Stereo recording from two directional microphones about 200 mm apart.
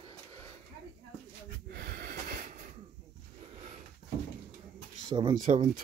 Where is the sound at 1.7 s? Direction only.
50° right (ahead or behind).